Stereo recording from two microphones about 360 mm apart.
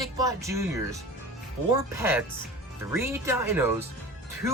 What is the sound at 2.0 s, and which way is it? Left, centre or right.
Speech, centre.